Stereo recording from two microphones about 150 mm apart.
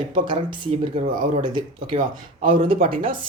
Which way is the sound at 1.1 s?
60° right (ahead or behind).